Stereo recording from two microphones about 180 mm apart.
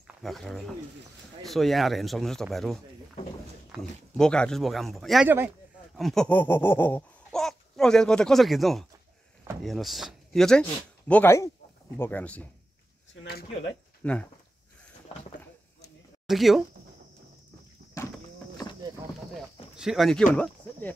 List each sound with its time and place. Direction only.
0.2 s speech: centre (ahead or behind)
4.2 s speech: 5° left (ahead or behind)
5.9 s a sound: centre (ahead or behind)
9.6 s speech: centre (ahead or behind)
13.2 s speech: 70° left (ahead or behind)
14.0 s speech: 5° left (ahead or behind)
16.3 s speech: centre (ahead or behind)
19.7 s speech: 5° right (ahead or behind)